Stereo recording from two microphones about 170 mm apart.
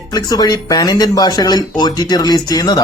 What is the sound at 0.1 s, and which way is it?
Speech, 25° left (ahead or behind).